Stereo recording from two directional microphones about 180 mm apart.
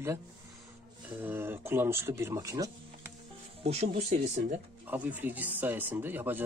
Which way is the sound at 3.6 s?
35° right (ahead or behind).